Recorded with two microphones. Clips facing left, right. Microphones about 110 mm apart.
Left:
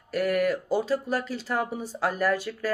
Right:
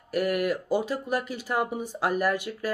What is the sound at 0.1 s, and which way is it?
Speech, 10° right (ahead or behind).